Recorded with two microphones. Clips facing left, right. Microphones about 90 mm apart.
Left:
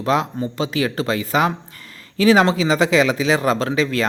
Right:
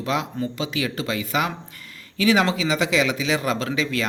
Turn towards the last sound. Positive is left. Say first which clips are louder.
# left 5 dB
turn(degrees=40)  # may be behind; listen again after turning